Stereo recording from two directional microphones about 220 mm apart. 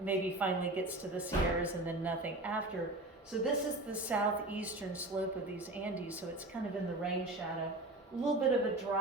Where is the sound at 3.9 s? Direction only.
5° right (ahead or behind).